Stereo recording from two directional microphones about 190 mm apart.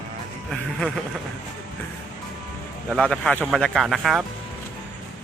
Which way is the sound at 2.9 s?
5° left (ahead or behind).